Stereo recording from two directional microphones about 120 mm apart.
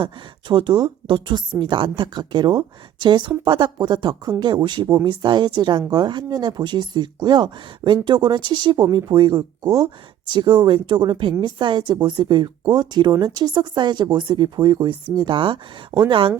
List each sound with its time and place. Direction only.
0.0 s speech: 40° right (ahead or behind)